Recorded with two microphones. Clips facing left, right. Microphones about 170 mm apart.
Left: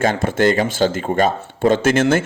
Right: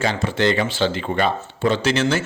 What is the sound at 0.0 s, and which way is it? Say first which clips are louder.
A man's voice: left 4 dB; 50° left (ahead or behind).